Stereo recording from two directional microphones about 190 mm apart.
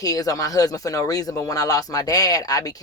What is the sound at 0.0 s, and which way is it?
Speech, 20° left (ahead or behind).